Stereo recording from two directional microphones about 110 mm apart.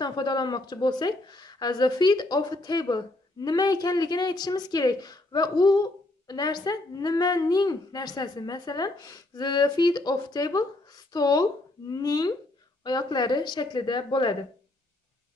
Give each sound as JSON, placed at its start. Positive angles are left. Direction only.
{"t": 0.0, "sound": "speech", "side_deg": 40}